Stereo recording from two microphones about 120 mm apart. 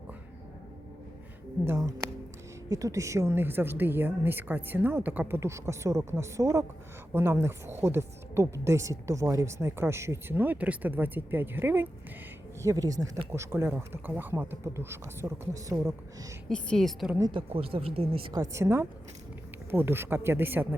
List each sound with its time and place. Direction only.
1.6 s music: 25° right (ahead or behind)
2.6 s speech: 25° right (ahead or behind)
12.6 s speech: 30° right (ahead or behind)
16.5 s a woman's voice: 5° left (ahead or behind)
17.3 s speech: 50° right (ahead or behind)
18.3 s speech: 30° right (ahead or behind)